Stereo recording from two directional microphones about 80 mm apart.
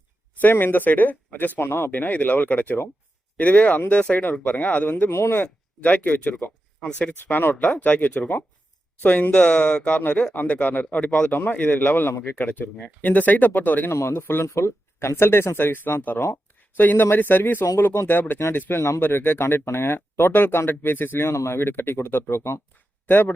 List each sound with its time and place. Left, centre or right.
0.4 s speech: left
10.0 s speech: left